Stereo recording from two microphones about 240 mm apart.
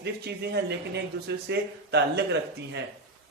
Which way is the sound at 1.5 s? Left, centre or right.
Right.